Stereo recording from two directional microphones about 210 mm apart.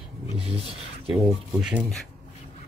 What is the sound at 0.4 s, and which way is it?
Speech, 25° right (ahead or behind).